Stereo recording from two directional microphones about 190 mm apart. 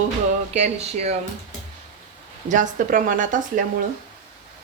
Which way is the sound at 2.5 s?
45° right (ahead or behind).